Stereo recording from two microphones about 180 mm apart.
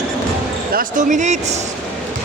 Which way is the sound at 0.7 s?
45° right (ahead or behind).